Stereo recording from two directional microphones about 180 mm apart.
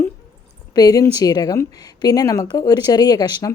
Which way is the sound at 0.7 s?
20° left (ahead or behind).